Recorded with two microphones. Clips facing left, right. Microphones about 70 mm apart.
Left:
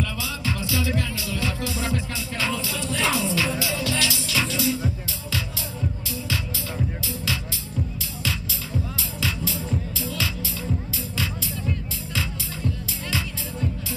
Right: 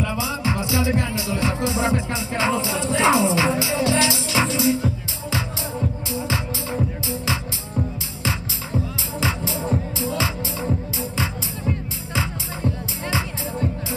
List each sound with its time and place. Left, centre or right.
0.0 s music: right
9.2 s music: right
12.2 s music: right